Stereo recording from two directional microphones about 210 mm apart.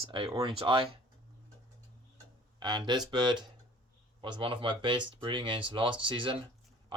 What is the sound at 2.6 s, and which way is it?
Speech, 20° right (ahead or behind).